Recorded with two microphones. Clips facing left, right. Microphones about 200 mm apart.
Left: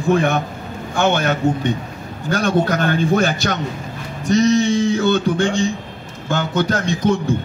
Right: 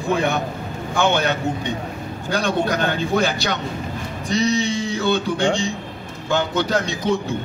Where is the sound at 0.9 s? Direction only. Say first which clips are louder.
Left 2 dB; 50° left (ahead or behind).